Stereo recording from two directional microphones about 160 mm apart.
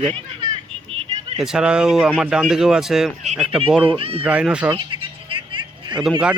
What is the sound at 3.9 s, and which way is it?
Speech, 35° right (ahead or behind).